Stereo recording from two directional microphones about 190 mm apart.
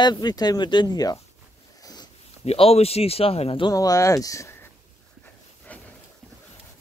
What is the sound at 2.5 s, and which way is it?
Speech, 30° left (ahead or behind).